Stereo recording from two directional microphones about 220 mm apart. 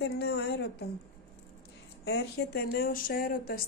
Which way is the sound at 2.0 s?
50° left (ahead or behind).